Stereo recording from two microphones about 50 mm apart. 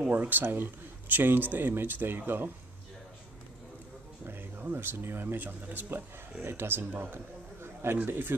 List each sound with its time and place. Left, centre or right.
0.1 s speech: right
4.3 s speech: right
6.4 s speech: right
7.6 s a sound: right
8.1 s speech: right